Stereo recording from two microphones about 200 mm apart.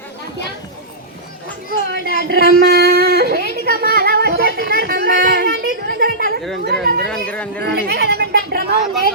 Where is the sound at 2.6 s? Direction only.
50° right (ahead or behind).